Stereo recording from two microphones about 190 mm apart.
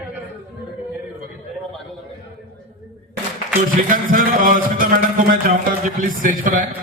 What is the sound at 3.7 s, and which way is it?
A man's voice, 45° right (ahead or behind).